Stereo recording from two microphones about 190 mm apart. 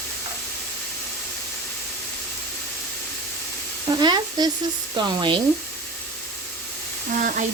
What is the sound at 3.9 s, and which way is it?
Speech, 20° right (ahead or behind).